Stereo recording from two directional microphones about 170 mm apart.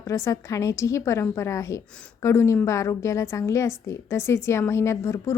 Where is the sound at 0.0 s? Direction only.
20° left (ahead or behind).